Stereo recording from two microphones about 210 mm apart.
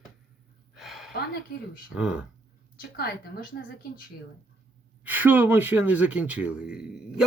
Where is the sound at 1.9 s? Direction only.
5° right (ahead or behind).